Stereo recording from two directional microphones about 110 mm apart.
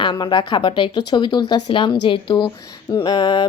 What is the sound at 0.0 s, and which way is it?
Speech, 45° left (ahead or behind).